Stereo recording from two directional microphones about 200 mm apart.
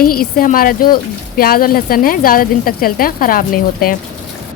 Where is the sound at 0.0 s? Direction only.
45° left (ahead or behind).